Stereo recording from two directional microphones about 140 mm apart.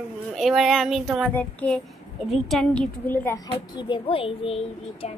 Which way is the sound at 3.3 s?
30° left (ahead or behind).